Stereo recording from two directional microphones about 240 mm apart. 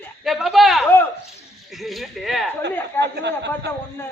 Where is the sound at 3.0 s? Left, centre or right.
Right.